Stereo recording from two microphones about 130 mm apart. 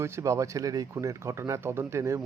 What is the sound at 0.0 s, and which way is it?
Speech, 20° right (ahead or behind).